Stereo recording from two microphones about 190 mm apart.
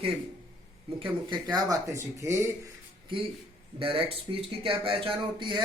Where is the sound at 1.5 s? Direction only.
15° right (ahead or behind).